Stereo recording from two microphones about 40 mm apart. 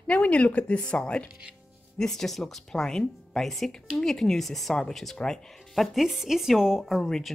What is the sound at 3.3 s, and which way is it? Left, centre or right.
Speech, centre.